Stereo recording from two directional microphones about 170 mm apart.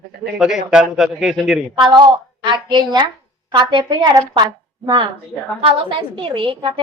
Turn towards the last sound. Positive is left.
turn(degrees=-30)  # may be behind; listen again after turning